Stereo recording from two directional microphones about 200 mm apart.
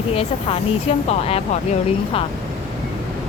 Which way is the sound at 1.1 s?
30° left (ahead or behind).